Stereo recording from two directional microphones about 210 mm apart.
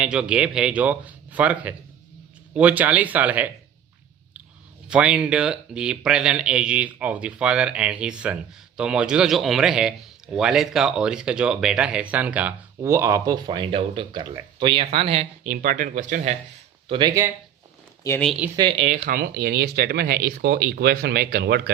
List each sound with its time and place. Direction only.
0.0 s speech: 5° right (ahead or behind)
4.9 s speech: 5° right (ahead or behind); by 15.5 s 30° right (ahead or behind)
15.6 s speech: 40° right (ahead or behind)
16.9 s speech: 20° right (ahead or behind)
18.2 s speech: centre (ahead or behind)
18.4 s speech: 20° right (ahead or behind); by 21.7 s 50° right (ahead or behind)